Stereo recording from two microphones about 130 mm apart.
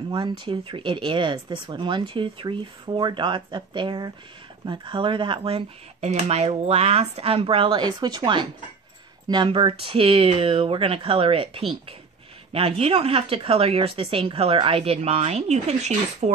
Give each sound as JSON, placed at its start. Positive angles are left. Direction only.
{"t": 0.1, "sound": "speech", "side_deg": -40}